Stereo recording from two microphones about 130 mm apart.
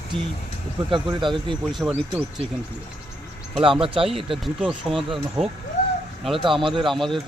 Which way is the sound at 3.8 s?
45° right (ahead or behind).